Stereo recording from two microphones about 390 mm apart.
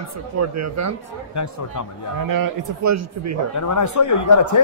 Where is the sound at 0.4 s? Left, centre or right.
Right.